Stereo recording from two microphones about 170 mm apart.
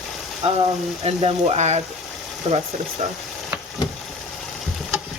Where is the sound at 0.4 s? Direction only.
40° right (ahead or behind).